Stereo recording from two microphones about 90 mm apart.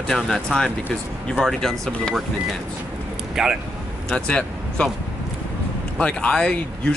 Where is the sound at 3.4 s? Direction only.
5° right (ahead or behind).